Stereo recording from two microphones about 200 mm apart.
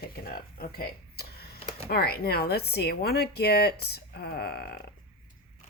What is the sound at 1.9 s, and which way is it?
Speech, 50° left (ahead or behind).